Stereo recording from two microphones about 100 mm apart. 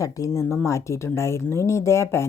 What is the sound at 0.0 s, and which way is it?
Speech, 35° left (ahead or behind).